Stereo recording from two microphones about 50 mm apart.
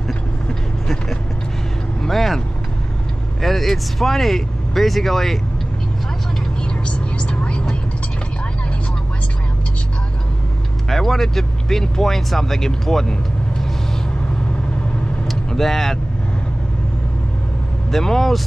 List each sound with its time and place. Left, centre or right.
0.5 s vehicle: centre
3.3 s speech: centre
6.6 s vehicle: left
10.9 s speech: centre
15.2 s vehicle: centre
17.9 s speech: centre